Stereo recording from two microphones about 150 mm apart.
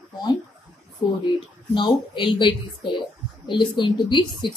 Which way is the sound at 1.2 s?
30° left (ahead or behind).